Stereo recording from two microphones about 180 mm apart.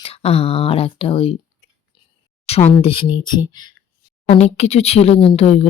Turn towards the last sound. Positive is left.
turn(degrees=35)  # may be behind; listen again after turning